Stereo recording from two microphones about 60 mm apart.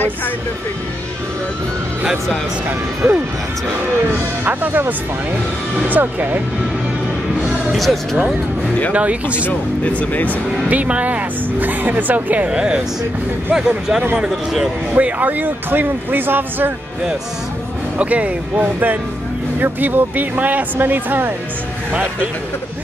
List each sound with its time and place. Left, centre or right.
3.0 s speech: right
4.5 s speech: right
7.7 s speech: centre
9.5 s speech: left
10.7 s speech: right
15.0 s speech: right
17.9 s speech: right